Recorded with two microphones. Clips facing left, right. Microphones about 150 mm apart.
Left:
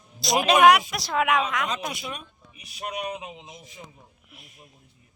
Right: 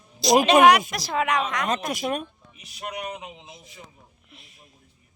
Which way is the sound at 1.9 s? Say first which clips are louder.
Right 9 dB; 50° right (ahead or behind).